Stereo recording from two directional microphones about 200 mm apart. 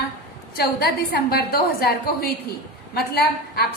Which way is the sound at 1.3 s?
50° left (ahead or behind).